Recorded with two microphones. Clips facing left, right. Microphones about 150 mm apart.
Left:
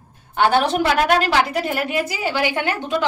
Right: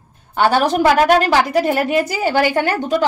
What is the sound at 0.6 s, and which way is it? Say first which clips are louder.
A woman's voice: right 5 dB; 45° right (ahead or behind).